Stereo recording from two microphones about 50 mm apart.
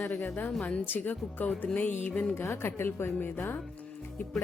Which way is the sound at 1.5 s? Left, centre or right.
Left.